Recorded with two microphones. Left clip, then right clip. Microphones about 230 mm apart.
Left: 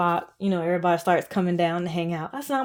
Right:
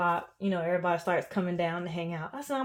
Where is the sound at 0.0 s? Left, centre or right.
Left.